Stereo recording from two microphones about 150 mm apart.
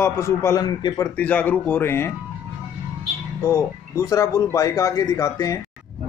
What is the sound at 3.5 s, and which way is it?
Speech, 20° left (ahead or behind).